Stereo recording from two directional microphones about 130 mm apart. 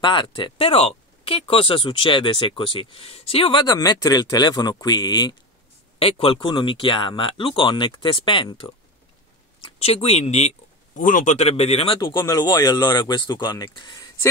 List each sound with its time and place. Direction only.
0.0 s speech: 40° left (ahead or behind)
5.9 s speech: 45° left (ahead or behind)
11.0 s speech: 90° left; by 12.0 s 50° left (ahead or behind)
12.0 s speech: 35° left (ahead or behind)